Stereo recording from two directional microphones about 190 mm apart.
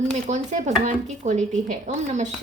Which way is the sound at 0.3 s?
40° right (ahead or behind).